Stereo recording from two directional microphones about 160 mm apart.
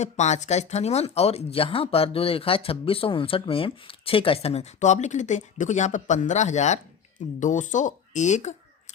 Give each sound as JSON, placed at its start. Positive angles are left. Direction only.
{"t": 0.0, "sound": "speech", "side_deg": 45}